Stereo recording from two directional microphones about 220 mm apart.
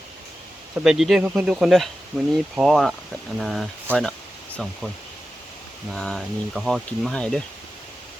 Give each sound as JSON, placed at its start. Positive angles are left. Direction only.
{"t": 0.9, "sound": "speech", "side_deg": 0}
{"t": 5.9, "sound": "speech", "side_deg": 0}